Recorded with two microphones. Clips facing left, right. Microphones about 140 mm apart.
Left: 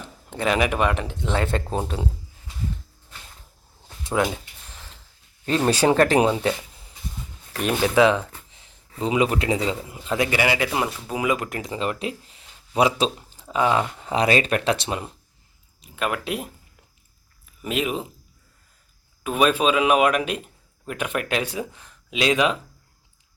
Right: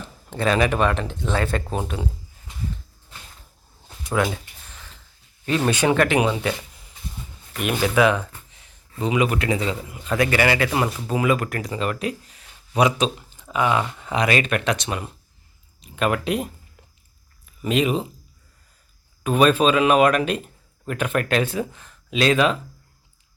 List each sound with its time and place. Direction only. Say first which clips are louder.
0.3 s speech: right 2 dB; 15° left (ahead or behind)
4.0 s speech: even; 20° left (ahead or behind)
5.5 s speech: left 1 dB; 30° left (ahead or behind)
7.6 s speech: left 1 dB; 25° left (ahead or behind)
10.7 s speech: right 2 dB; 5° left (ahead or behind)
11.1 s speech: right 4 dB; 15° left (ahead or behind)
15.8 s speech: right 4 dB; 5° left (ahead or behind)
17.6 s speech: right 4 dB; 5° left (ahead or behind)
19.2 s speech: right 3 dB; 5° left (ahead or behind)